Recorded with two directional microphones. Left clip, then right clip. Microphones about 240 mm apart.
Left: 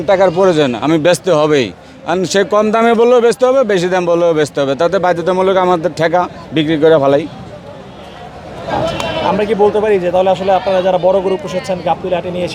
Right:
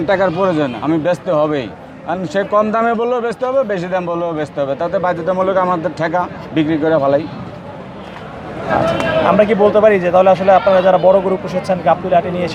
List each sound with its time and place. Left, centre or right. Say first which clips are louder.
0.1 s a man's voice: left 5 dB; left
9.4 s speech: right 2 dB; left